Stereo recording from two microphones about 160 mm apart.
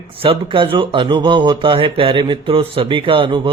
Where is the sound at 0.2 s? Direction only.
35° right (ahead or behind).